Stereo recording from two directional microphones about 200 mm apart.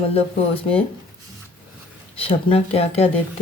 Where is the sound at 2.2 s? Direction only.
30° left (ahead or behind).